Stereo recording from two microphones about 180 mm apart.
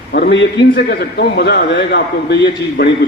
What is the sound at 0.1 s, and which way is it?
Speech, 65° left (ahead or behind).